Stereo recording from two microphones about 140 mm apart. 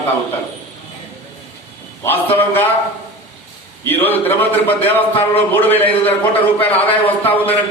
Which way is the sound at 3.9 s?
15° left (ahead or behind).